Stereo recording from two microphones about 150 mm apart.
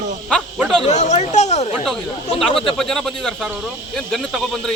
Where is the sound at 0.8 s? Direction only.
50° left (ahead or behind).